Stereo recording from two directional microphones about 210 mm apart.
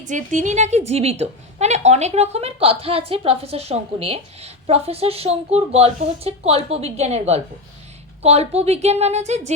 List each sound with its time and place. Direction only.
0.0 s a woman's voice: 35° right (ahead or behind)